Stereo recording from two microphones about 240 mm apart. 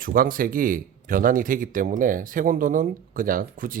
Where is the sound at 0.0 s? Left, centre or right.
Right.